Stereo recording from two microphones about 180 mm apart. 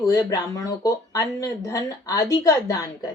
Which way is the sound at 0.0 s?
20° left (ahead or behind).